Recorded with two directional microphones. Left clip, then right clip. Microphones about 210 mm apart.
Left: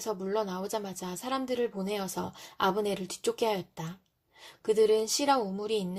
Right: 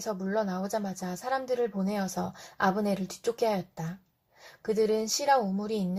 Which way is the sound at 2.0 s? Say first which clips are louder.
Right 2 dB; 50° left (ahead or behind).